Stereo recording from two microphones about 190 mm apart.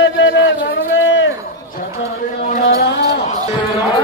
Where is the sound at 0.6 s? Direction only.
70° left (ahead or behind).